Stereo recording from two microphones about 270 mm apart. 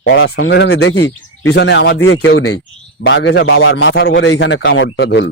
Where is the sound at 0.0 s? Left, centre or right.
Left.